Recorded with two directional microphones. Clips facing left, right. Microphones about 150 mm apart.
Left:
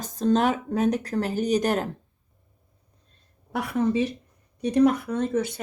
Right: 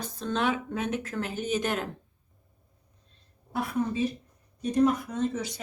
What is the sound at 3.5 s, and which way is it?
Speech, 85° left.